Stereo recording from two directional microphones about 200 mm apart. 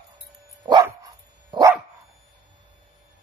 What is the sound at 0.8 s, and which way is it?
Dog, 15° right (ahead or behind).